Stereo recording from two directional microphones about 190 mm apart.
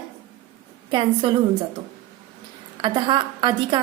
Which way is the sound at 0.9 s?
25° right (ahead or behind).